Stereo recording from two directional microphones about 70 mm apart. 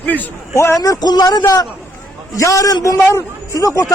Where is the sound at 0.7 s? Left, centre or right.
Left.